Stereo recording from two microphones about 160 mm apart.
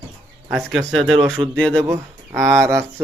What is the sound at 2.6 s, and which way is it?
Speech, 15° right (ahead or behind).